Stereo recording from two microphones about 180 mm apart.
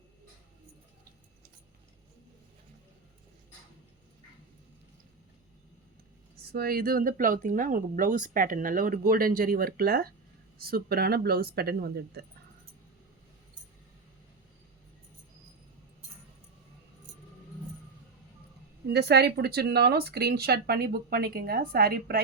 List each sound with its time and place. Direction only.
6.5 s speech: 60° right (ahead or behind)
18.9 s speech: 65° right (ahead or behind)